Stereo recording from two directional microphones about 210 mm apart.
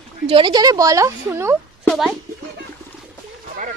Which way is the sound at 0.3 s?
25° right (ahead or behind).